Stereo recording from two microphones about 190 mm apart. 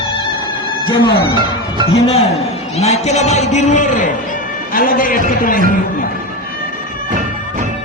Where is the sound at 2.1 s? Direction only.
35° left (ahead or behind).